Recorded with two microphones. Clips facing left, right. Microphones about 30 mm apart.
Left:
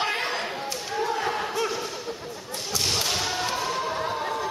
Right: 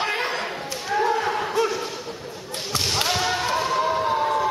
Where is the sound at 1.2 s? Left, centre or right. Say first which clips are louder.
Right 4 dB; centre.